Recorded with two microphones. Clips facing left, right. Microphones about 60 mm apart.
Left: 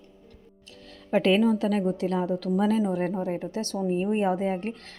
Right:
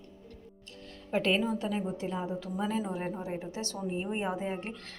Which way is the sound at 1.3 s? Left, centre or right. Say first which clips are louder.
Left 8 dB; left.